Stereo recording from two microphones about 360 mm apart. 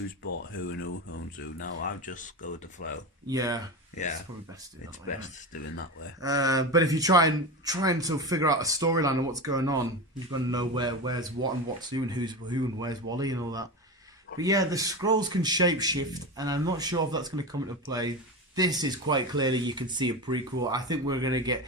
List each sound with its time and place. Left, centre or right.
0.7 s speech: left
3.2 s speech: centre
6.2 s speech: centre